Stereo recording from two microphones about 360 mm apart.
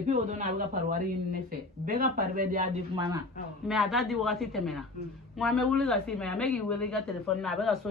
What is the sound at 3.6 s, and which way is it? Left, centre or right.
Speech, centre.